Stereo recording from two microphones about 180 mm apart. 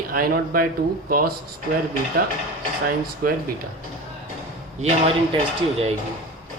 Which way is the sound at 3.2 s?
50° right (ahead or behind).